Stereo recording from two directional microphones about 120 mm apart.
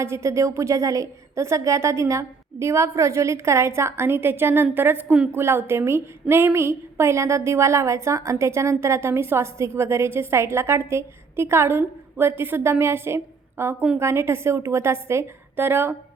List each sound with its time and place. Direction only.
0.0 s a woman's voice: 25° right (ahead or behind)